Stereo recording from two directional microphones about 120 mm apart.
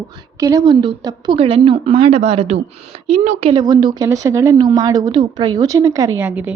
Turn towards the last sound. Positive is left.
turn(degrees=-15)  # may be behind; listen again after turning